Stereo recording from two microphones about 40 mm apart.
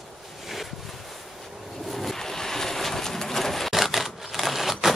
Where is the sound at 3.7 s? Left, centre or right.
Centre.